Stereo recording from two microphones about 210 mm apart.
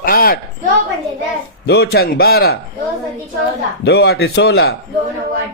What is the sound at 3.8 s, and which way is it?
Speech, 50° left (ahead or behind).